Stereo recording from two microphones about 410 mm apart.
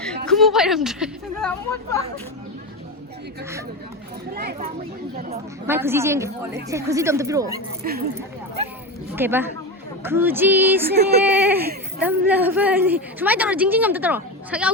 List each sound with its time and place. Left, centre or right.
0.3 s a woman's voice: centre
4.4 s speech: right
5.6 s a woman's voice: centre
7.8 s speech: right
9.1 s a woman's voice: centre